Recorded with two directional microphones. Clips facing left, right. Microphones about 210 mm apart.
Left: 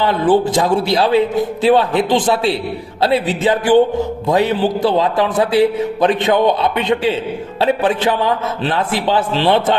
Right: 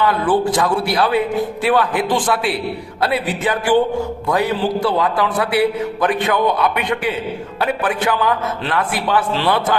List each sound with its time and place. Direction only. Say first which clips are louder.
0.0 s a man's voice: left 3 dB; 25° left (ahead or behind)